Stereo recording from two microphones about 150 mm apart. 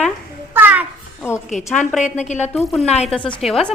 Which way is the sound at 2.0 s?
50° left (ahead or behind).